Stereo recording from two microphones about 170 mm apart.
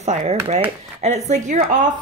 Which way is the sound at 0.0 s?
45° right (ahead or behind).